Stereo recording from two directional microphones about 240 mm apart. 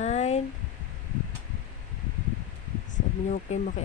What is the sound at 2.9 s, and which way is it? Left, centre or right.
Speech, left.